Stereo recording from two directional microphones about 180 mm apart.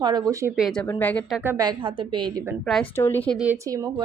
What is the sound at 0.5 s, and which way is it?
Speech, centre (ahead or behind).